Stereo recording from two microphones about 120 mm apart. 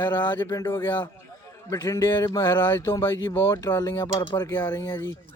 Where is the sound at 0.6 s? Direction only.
15° left (ahead or behind).